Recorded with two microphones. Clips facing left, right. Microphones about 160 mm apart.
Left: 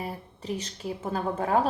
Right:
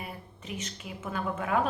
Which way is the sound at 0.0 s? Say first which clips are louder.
Left 6 dB; 35° left (ahead or behind).